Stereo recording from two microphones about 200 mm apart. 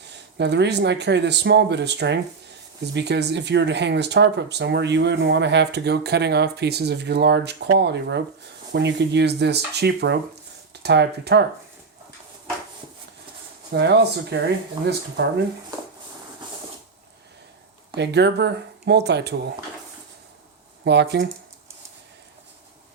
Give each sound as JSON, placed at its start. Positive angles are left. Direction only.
{"t": 0.0, "sound": "speech", "side_deg": -60}
{"t": 13.7, "sound": "speech", "side_deg": -55}
{"t": 17.9, "sound": "speech", "side_deg": -55}
{"t": 20.8, "sound": "speech", "side_deg": -60}